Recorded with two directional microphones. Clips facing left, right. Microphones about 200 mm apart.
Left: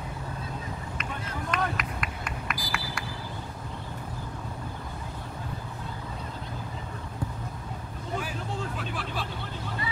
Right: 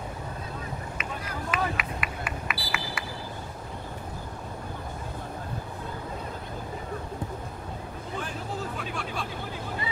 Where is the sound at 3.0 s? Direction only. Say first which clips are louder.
Even; 5° right (ahead or behind).